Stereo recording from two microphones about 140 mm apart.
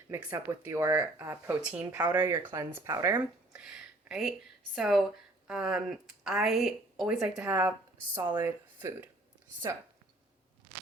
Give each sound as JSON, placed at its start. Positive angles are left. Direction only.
{"t": 0.3, "sound": "speech", "side_deg": -20}
{"t": 3.5, "sound": "speech", "side_deg": -5}